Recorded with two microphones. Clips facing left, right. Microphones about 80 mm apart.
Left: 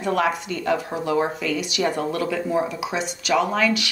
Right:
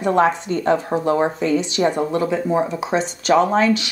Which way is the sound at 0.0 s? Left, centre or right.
Right.